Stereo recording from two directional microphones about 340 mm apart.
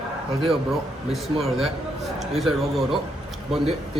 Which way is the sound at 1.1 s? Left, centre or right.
Centre.